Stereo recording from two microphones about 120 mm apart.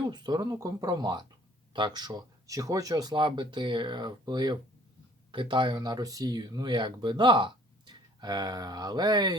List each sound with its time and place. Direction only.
0.0 s speech: 35° right (ahead or behind)